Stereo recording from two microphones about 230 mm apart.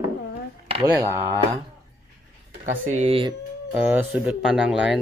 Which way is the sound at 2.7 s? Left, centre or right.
Right.